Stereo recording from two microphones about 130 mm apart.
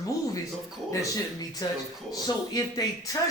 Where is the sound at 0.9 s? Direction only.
25° left (ahead or behind).